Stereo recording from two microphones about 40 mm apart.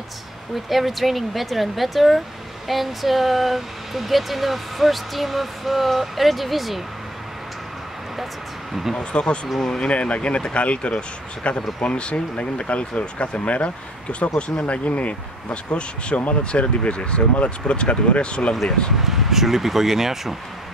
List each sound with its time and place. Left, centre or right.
0.7 s speech: centre
8.9 s speech: left
9.8 s speech: left
14.6 s speech: left
18.5 s speech: centre
18.9 s speech: centre